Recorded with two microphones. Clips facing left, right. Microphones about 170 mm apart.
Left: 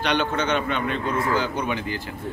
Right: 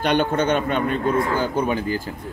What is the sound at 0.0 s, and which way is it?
A man's voice, 50° right (ahead or behind).